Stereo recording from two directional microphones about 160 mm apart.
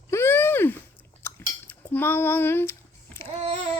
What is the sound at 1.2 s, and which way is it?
Cutlery, 15° left (ahead or behind).